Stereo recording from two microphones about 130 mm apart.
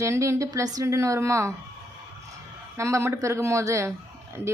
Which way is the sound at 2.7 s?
20° right (ahead or behind).